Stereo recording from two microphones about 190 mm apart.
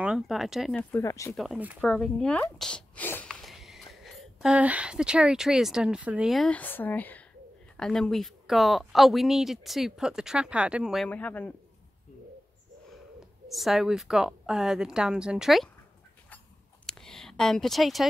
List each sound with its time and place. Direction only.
0.0 s speech: 5° right (ahead or behind)
1.0 s a man's voice: 15° left (ahead or behind)
1.3 s speech: centre (ahead or behind)
11.1 s a man's voice: 10° left (ahead or behind)
13.5 s speech: centre (ahead or behind)
16.8 s a sound: 5° left (ahead or behind)